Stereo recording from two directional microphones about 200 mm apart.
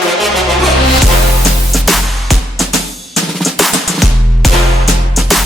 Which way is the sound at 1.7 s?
Centre (ahead or behind).